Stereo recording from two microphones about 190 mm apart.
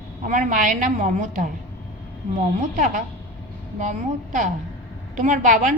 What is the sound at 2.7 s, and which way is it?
Speech, 45° right (ahead or behind).